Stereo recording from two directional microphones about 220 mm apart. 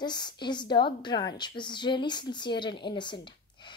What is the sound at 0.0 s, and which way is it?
A woman's voice, 20° left (ahead or behind).